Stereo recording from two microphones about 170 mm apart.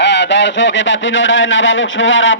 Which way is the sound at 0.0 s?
90° left.